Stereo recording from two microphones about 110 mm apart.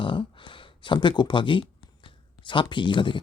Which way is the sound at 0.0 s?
45° left (ahead or behind).